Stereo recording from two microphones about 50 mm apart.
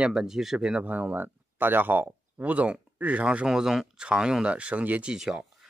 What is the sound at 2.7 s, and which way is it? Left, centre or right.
Speech, right.